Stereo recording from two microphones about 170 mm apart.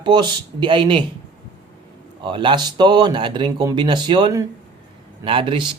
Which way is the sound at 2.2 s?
25° right (ahead or behind).